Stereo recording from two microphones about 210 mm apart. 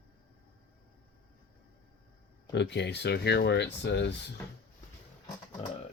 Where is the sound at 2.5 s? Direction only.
55° left (ahead or behind).